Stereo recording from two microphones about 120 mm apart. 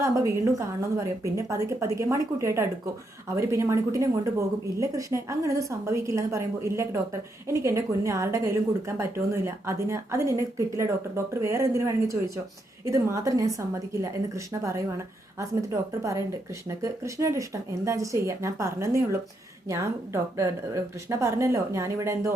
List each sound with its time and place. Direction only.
0.0 s a woman's voice: 25° right (ahead or behind)